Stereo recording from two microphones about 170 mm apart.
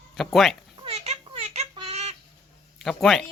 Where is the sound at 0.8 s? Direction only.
40° right (ahead or behind).